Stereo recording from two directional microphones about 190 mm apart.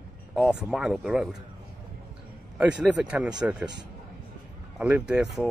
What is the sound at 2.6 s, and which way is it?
Speech, 5° right (ahead or behind).